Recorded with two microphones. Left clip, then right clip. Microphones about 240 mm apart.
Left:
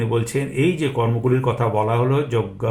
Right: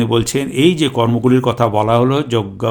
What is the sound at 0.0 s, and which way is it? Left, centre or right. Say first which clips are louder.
A man's voice: right 6 dB; right.